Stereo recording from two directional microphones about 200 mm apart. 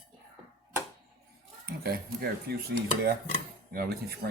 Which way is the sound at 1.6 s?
50° right (ahead or behind).